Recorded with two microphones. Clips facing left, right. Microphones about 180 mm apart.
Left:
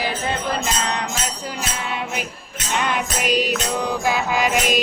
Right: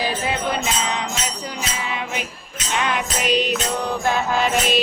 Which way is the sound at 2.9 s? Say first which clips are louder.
Right 1 dB; 10° left (ahead or behind).